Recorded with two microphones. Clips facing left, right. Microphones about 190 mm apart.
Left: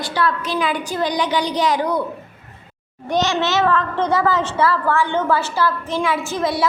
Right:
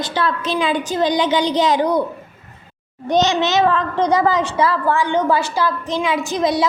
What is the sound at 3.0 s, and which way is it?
A child's voice, 20° right (ahead or behind).